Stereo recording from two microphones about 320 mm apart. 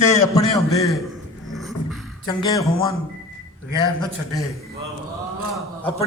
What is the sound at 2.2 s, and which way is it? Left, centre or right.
Speech, centre.